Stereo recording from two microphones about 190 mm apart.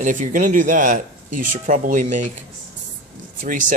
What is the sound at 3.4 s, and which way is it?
Speech, 45° right (ahead or behind).